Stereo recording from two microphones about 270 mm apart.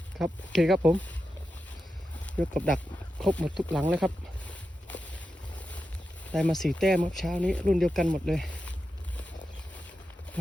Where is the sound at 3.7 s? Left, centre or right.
Centre.